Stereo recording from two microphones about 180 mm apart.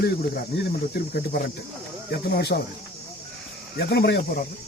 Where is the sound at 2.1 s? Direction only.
65° left (ahead or behind).